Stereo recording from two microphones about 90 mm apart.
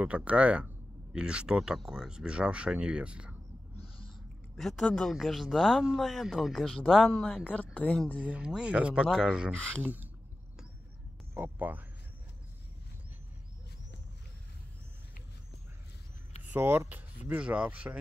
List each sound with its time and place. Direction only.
0.0 s speech: 15° right (ahead or behind)
3.7 s owl: 90° left
4.6 s speech: 5° left (ahead or behind)
7.0 s speech: 5° right (ahead or behind)
7.4 s speech: 15° left (ahead or behind)
8.3 s speech: 10° right (ahead or behind)
9.6 s speech: 10° left (ahead or behind)
11.3 s speech: 20° right (ahead or behind)
16.5 s speech: 25° right (ahead or behind)